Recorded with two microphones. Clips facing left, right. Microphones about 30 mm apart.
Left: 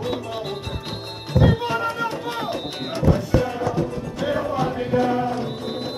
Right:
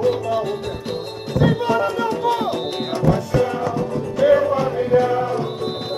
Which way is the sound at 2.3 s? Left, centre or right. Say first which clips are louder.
Right 5 dB; centre.